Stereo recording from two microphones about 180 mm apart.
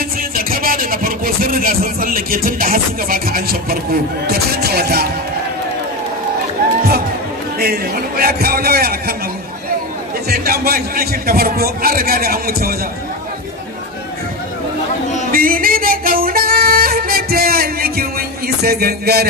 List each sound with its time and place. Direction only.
0.4 s speech: 55° right (ahead or behind)
7.5 s a man's voice: 60° right (ahead or behind)
10.3 s a man's voice: 60° right (ahead or behind)
15.3 s music: 50° right (ahead or behind)
18.6 s a man's voice: 60° right (ahead or behind)